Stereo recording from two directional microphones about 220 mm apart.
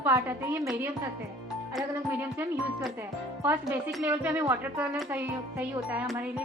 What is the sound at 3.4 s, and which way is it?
Speech, 10° right (ahead or behind).